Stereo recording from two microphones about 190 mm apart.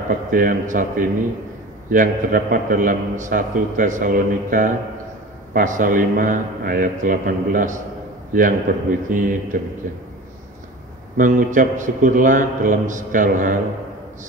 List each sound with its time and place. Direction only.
0.3 s a man's voice: 45° right (ahead or behind)
11.1 s a man's voice: 45° right (ahead or behind)